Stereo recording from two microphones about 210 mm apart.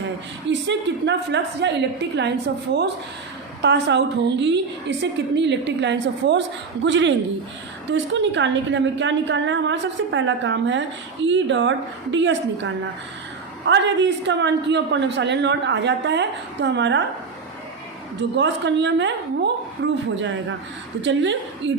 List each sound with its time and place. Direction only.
0.4 s a woman's voice: 55° right (ahead or behind)
3.6 s a woman's voice: 55° right (ahead or behind)
18.2 s a woman's voice: 60° right (ahead or behind)
21.0 s a woman's voice: 60° right (ahead or behind)